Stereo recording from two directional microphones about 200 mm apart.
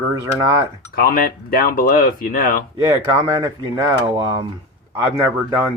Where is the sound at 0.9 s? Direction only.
45° left (ahead or behind).